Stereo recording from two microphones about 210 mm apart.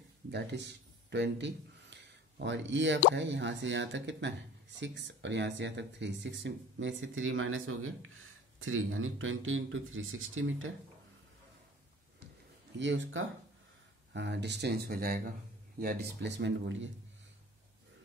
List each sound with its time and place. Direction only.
0.3 s speech: 55° right (ahead or behind); by 10.7 s 70° right (ahead or behind)
12.7 s speech: 60° right (ahead or behind)